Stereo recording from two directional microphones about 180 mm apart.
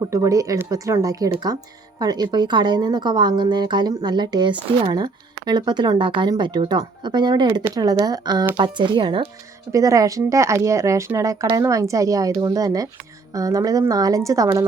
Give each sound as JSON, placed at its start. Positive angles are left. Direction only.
{"t": 0.1, "sound": "speech", "side_deg": -20}